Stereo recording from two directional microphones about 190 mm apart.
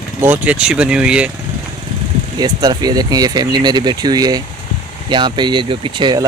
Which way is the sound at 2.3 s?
20° right (ahead or behind).